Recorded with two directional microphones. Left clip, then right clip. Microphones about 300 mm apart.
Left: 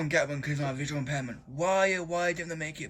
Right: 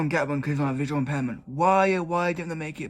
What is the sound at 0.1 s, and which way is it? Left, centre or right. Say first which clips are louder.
A man's voice: right 2 dB; centre.